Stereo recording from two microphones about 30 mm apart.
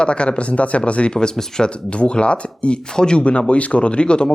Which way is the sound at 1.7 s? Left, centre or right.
Left.